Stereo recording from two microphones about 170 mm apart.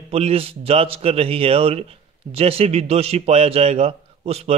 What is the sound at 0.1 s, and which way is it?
A man's voice, 35° right (ahead or behind).